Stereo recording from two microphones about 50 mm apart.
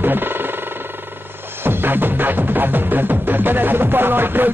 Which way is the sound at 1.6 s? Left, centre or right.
Right.